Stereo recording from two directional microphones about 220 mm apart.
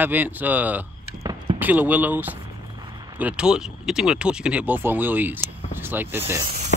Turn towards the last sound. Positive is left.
turn(degrees=-15)  # may be behind; listen again after turning